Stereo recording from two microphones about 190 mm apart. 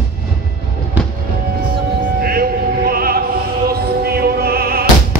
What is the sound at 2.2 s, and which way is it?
Opera, 55° right (ahead or behind).